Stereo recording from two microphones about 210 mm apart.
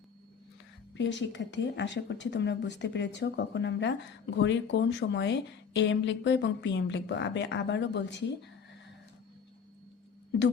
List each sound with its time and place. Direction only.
0.9 s a woman's voice: 60° left (ahead or behind)